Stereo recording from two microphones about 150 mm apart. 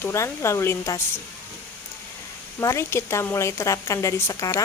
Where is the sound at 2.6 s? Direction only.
20° left (ahead or behind).